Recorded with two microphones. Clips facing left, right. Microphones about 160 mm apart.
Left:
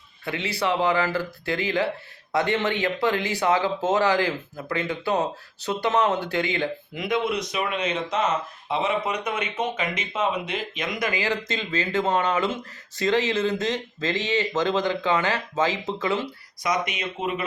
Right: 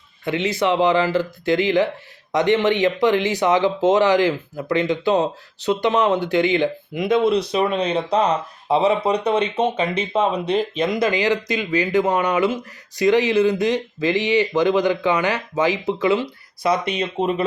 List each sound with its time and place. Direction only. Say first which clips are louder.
0.3 s speech: right 6 dB; 20° right (ahead or behind)
16.6 s speech: right 6 dB; 30° right (ahead or behind)